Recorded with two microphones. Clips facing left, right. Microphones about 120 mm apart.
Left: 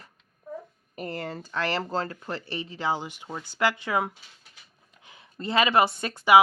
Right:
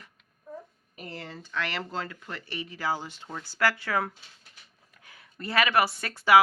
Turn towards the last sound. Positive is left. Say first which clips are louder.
# left 2 dB
turn(degrees=20)  # may be behind; listen again after turning